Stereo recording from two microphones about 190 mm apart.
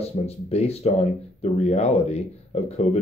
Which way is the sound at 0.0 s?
30° left (ahead or behind).